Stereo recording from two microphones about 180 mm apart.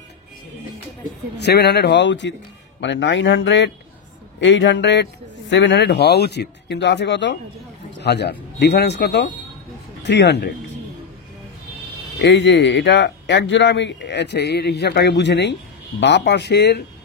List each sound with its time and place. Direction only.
1.4 s speech: 65° left (ahead or behind)
12.2 s speech: 80° left; by 16.8 s 65° left (ahead or behind)